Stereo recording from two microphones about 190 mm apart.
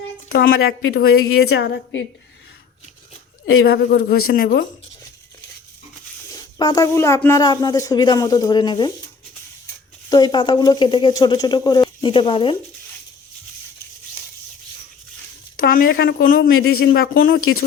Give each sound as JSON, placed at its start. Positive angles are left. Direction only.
{"t": 0.3, "sound": "a woman's voice", "side_deg": 50}
{"t": 0.8, "sound": "speech", "side_deg": 85}
{"t": 1.4, "sound": "a woman's voice", "side_deg": 60}
{"t": 3.6, "sound": "speech", "side_deg": 55}
{"t": 6.3, "sound": "speech", "side_deg": 20}
{"t": 10.1, "sound": "speech", "side_deg": 20}
{"t": 15.5, "sound": "speech", "side_deg": 50}